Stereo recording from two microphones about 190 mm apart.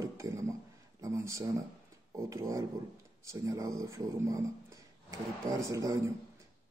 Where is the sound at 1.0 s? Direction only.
15° right (ahead or behind).